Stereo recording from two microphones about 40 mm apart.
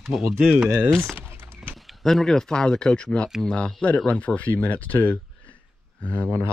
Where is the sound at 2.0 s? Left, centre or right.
Centre; by 6.3 s left.